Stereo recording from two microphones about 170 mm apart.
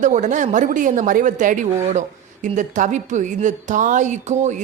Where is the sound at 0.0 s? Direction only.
45° right (ahead or behind).